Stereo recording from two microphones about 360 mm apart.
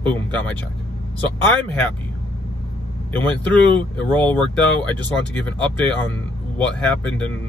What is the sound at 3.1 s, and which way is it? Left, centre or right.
Speech, centre.